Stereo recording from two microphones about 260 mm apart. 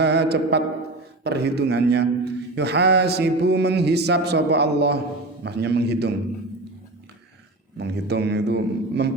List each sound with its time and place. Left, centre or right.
0.0 s mantra: right
1.2 s a man's voice: right
7.8 s a man's voice: right